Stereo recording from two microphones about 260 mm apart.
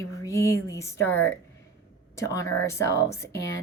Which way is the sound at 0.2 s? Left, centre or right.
Centre.